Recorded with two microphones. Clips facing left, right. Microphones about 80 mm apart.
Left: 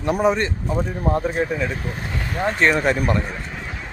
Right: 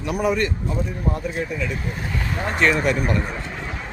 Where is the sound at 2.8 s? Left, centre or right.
Left.